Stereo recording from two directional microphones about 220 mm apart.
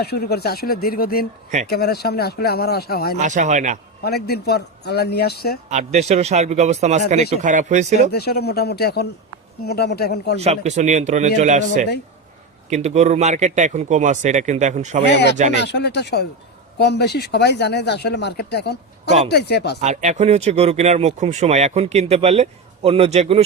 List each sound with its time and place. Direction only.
0.0 s speech: 45° left (ahead or behind)
3.2 s speech: 35° right (ahead or behind)
4.0 s speech: 45° left (ahead or behind)
5.6 s speech: 30° right (ahead or behind)
8.1 s speech: 45° left (ahead or behind)
10.4 s speech: 30° right (ahead or behind)
15.5 s speech: 50° left (ahead or behind)
19.8 s speech: 30° right (ahead or behind)